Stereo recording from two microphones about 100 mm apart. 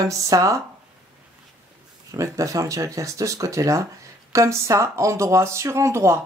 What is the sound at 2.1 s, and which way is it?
Speech, 35° right (ahead or behind).